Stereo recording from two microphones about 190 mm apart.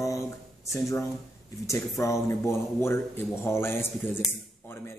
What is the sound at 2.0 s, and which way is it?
A man's voice, 15° left (ahead or behind).